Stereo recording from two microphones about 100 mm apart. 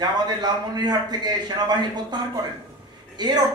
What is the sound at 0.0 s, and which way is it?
A man's voice, 45° right (ahead or behind).